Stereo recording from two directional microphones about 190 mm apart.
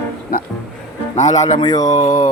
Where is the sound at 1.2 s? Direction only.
40° left (ahead or behind).